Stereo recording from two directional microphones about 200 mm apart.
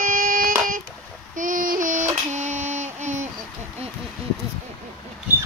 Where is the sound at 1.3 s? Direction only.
40° right (ahead or behind).